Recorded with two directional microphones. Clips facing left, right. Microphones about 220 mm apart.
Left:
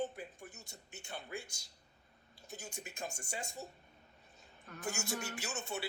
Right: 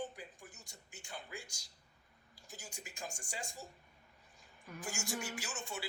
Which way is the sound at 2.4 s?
25° left (ahead or behind).